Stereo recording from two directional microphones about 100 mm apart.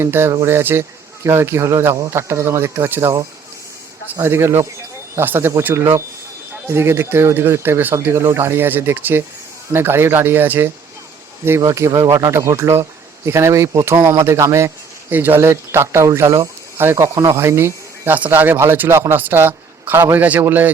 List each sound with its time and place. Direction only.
0.0 s speech: 25° right (ahead or behind)
4.2 s speech: 25° right (ahead or behind)
11.6 s speech: 30° right (ahead or behind)
15.1 s speech: 20° right (ahead or behind)